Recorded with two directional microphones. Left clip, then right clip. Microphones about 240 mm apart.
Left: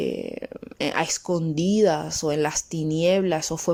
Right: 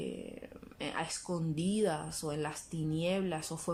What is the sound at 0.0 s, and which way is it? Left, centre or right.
Speech, left.